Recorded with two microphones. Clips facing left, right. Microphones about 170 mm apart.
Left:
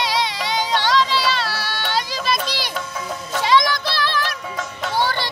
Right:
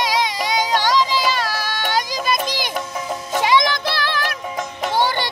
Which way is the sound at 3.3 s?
15° right (ahead or behind).